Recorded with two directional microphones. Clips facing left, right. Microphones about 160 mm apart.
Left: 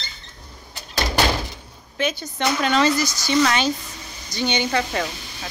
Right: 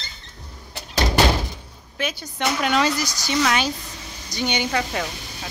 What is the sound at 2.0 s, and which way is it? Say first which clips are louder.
Speech: left 3 dB; 5° right (ahead or behind).